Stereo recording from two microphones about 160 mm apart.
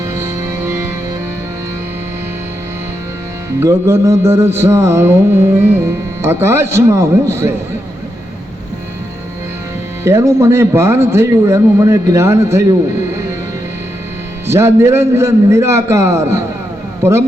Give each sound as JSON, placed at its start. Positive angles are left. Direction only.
{"t": 0.0, "sound": "music", "side_deg": -15}
{"t": 3.6, "sound": "a man's voice", "side_deg": -15}
{"t": 10.0, "sound": "a man's voice", "side_deg": -15}
{"t": 14.4, "sound": "a man's voice", "side_deg": -15}